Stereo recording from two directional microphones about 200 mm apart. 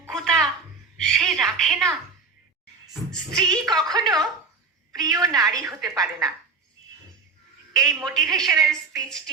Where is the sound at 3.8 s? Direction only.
20° right (ahead or behind).